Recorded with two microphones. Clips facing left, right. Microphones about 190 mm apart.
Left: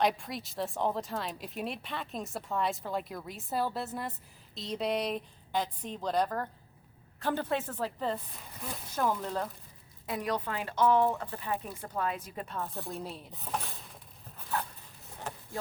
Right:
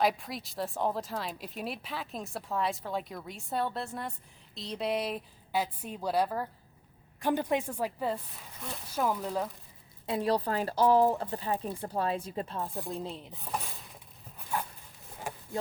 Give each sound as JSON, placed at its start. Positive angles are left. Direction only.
{"t": 0.0, "sound": "a woman's voice", "side_deg": 0}
{"t": 10.1, "sound": "speech", "side_deg": -30}
{"t": 12.8, "sound": "speech", "side_deg": 0}
{"t": 14.5, "sound": "dog", "side_deg": -10}
{"t": 15.3, "sound": "a sound", "side_deg": -10}